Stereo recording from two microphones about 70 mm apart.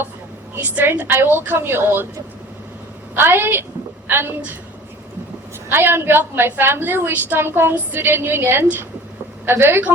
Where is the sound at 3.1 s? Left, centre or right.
Right.